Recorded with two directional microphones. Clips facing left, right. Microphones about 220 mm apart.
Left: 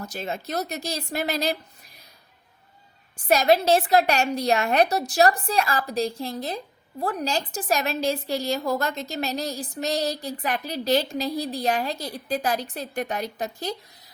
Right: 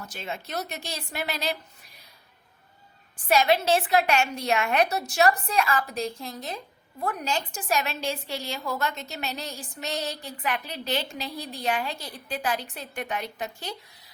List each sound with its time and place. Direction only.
0.0 s a woman's voice: 40° left (ahead or behind)
3.2 s a woman's voice: 40° left (ahead or behind)